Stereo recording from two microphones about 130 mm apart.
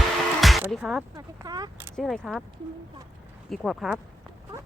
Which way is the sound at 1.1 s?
30° right (ahead or behind).